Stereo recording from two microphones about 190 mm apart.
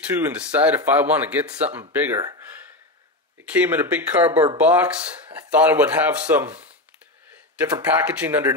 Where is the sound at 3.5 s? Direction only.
10° right (ahead or behind).